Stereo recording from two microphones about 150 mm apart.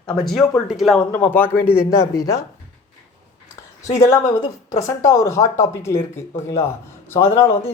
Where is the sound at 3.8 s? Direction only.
20° left (ahead or behind).